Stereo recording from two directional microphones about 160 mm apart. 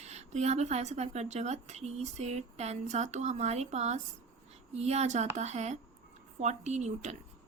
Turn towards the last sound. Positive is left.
turn(degrees=-45)  # may be behind; listen again after turning